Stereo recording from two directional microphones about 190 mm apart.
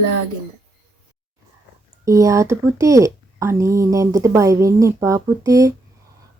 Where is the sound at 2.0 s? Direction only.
15° right (ahead or behind).